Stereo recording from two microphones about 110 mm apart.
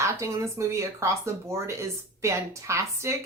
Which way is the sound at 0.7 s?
25° right (ahead or behind).